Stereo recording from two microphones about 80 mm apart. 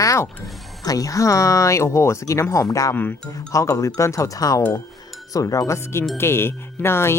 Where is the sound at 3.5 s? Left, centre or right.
Left.